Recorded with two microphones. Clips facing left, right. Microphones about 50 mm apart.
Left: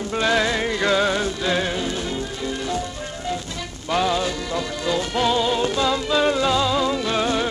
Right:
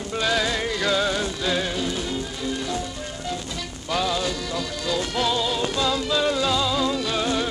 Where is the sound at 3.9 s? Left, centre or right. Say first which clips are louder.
Left 3 dB; centre.